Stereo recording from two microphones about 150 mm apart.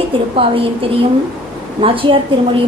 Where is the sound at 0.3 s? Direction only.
40° right (ahead or behind).